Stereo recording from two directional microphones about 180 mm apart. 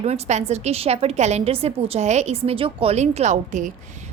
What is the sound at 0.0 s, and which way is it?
A woman's voice, 40° right (ahead or behind).